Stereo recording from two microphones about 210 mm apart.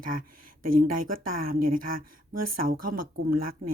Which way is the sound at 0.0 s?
40° right (ahead or behind).